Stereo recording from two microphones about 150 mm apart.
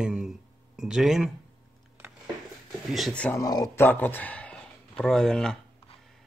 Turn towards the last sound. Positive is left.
turn(degrees=5)  # may be behind; listen again after turning